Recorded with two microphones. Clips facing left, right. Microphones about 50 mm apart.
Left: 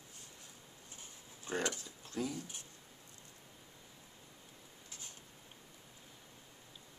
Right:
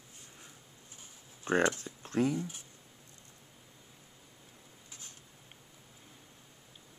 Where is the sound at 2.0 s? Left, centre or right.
Right.